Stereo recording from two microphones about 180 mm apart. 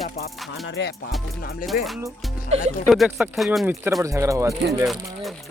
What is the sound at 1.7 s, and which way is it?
Speech, 50° left (ahead or behind).